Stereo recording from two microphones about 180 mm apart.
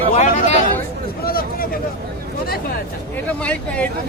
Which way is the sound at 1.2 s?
55° left (ahead or behind).